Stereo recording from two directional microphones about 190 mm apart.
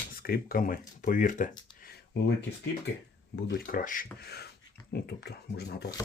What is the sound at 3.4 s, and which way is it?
Speech, 65° left (ahead or behind).